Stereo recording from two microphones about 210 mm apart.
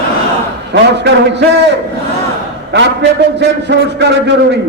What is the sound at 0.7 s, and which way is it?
A man's voice, 55° right (ahead or behind).